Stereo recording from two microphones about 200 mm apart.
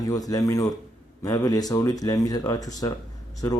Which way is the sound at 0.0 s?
20° left (ahead or behind).